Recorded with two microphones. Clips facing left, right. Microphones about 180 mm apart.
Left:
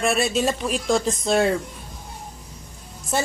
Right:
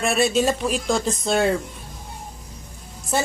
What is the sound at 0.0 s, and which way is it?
Speech, centre (ahead or behind).